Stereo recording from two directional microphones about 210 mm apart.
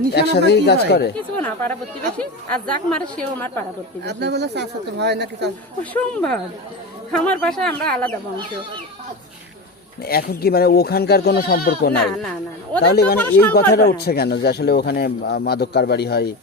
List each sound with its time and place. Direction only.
0.1 s speech: 50° left (ahead or behind)
1.1 s speech: 10° left (ahead or behind)
4.0 s speech: 55° right (ahead or behind)
5.8 s speech: 5° left (ahead or behind)
10.0 s speech: 45° left (ahead or behind)
13.1 s speech: 10° left (ahead or behind)
13.5 s speech: 45° left (ahead or behind)